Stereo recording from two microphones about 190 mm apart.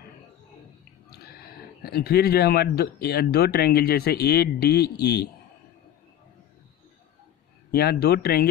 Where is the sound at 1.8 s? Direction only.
55° left (ahead or behind).